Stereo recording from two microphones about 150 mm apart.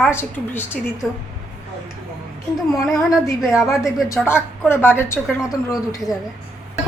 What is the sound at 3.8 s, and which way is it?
Speech, 20° left (ahead or behind).